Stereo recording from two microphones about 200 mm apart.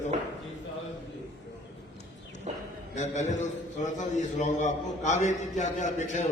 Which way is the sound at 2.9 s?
35° left (ahead or behind).